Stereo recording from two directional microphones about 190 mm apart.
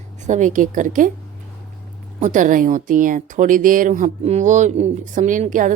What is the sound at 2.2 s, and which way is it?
A woman's voice, 40° right (ahead or behind).